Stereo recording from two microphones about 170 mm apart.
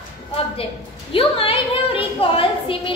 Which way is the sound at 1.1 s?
35° left (ahead or behind).